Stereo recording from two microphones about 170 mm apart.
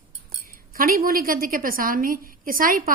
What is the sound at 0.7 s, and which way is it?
A woman's voice, 55° right (ahead or behind).